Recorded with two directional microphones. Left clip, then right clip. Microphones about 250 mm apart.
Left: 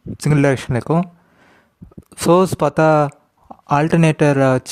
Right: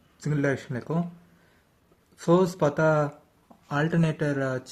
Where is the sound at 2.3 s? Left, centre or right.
Left.